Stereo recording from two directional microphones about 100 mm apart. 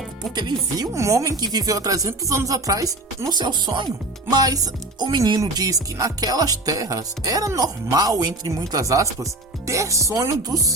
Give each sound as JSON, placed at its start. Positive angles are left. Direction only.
{"t": 0.3, "sound": "speech", "side_deg": -45}
{"t": 0.9, "sound": "music", "side_deg": -30}